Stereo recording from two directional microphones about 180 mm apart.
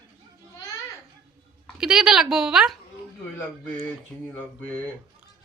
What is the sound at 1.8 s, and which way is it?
A woman's voice, 5° right (ahead or behind).